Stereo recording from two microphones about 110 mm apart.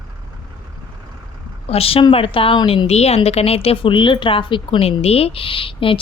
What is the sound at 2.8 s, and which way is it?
A woman's voice, 70° left (ahead or behind).